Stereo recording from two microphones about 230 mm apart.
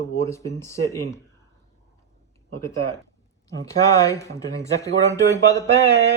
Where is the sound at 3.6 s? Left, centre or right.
Centre.